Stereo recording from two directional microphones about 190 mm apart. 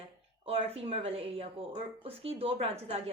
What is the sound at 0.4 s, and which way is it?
A woman's voice, 30° right (ahead or behind).